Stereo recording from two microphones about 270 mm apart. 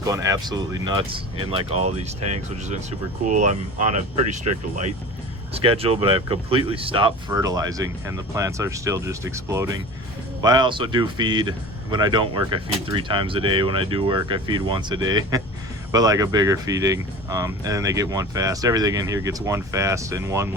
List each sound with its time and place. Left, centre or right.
0.0 s speech: centre
3.2 s speech: right
5.5 s speech: right